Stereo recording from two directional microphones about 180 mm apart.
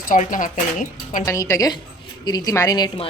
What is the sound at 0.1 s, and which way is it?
Speech, 50° left (ahead or behind).